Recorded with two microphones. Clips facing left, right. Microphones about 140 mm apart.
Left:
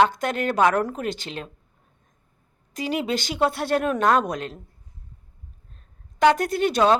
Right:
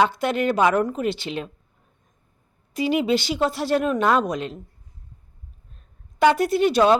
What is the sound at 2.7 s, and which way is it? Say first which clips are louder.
Speech: right 5 dB; 45° left (ahead or behind).